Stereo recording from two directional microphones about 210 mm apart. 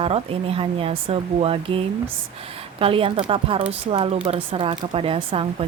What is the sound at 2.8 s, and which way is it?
A woman's voice, 25° right (ahead or behind).